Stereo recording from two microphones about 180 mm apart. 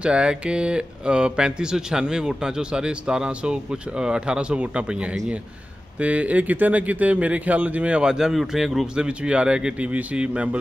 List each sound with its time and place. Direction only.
0.0 s speech: 5° right (ahead or behind)